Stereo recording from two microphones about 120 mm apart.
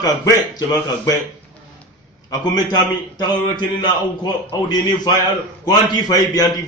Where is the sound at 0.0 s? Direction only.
30° left (ahead or behind).